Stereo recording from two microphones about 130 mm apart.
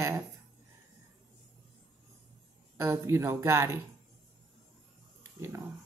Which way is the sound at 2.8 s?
20° right (ahead or behind).